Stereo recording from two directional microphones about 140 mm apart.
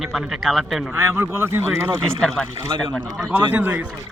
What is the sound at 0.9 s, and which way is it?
Speech, 15° right (ahead or behind).